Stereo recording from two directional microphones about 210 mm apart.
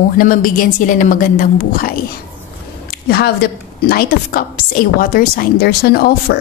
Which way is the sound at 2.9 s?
50° left (ahead or behind).